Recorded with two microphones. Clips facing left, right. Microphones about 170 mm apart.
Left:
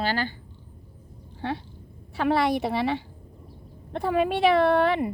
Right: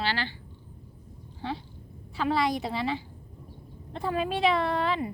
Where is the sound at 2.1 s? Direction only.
65° left (ahead or behind).